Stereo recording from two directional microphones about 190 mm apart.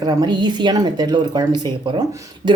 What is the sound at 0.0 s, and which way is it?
Speech, 20° right (ahead or behind).